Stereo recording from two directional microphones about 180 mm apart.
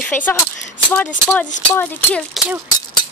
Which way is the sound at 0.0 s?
10° left (ahead or behind).